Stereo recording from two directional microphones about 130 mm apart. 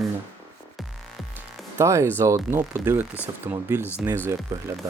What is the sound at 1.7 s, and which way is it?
Speech, 20° right (ahead or behind).